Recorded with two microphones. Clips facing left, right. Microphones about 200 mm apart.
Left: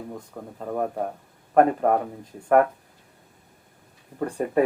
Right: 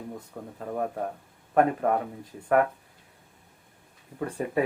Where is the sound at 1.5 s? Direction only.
45° left (ahead or behind).